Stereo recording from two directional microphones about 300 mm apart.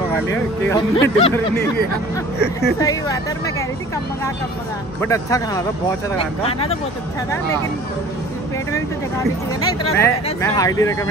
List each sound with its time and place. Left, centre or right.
0.1 s speech: centre
2.8 s speech: centre
5.0 s speech: centre
8.7 s speech: centre